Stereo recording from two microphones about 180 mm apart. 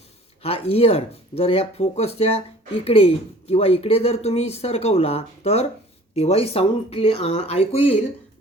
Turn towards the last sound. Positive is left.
turn(degrees=35)  # may be behind; listen again after turning